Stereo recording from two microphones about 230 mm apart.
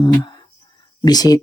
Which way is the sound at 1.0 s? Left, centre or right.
Centre.